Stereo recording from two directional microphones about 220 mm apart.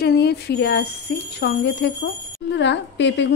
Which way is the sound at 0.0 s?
50° left (ahead or behind).